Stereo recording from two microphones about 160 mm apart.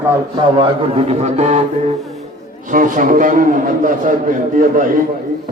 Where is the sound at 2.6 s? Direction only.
55° right (ahead or behind).